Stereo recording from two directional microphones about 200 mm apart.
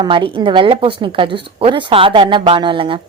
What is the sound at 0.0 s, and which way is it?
Speech, 25° right (ahead or behind).